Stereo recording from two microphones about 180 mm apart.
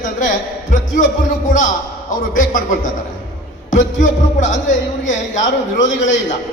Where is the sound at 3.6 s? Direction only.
45° left (ahead or behind).